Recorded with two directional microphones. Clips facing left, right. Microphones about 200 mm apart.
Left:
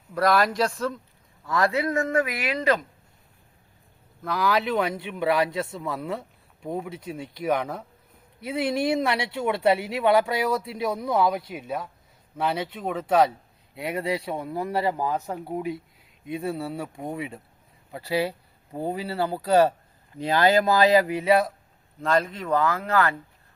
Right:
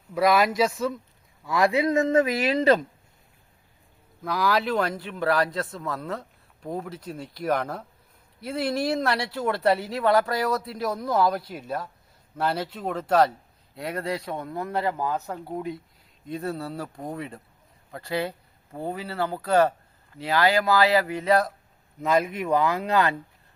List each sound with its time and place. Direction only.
0.1 s speech: 5° right (ahead or behind); by 2.7 s 25° right (ahead or behind)
4.2 s speech: centre (ahead or behind)
22.0 s speech: 10° right (ahead or behind)